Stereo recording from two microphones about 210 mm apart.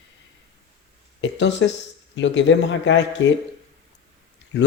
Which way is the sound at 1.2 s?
60° left (ahead or behind).